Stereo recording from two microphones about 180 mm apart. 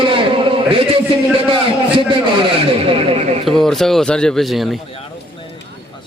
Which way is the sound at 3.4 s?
Centre (ahead or behind).